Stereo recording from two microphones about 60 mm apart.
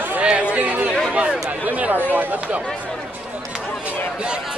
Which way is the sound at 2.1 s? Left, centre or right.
Right.